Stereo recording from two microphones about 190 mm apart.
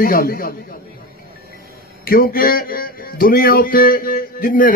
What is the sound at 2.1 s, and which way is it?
A man's voice, 50° left (ahead or behind).